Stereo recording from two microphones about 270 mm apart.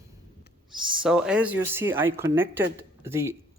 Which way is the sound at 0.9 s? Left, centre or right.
Centre.